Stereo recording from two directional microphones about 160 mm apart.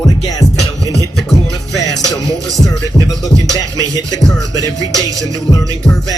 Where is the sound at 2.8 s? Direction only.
20° right (ahead or behind).